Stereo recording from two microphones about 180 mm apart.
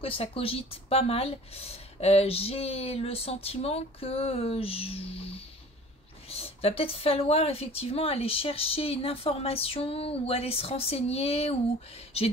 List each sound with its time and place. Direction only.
0.0 s speech: 30° left (ahead or behind)